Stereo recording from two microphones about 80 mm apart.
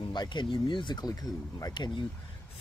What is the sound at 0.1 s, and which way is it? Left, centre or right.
Speech, left.